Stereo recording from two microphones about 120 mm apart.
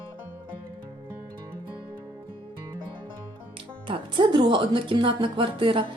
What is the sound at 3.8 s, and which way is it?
Speech, 45° right (ahead or behind).